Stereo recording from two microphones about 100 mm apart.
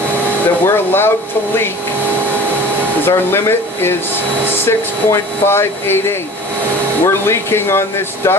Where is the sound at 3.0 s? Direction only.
25° left (ahead or behind).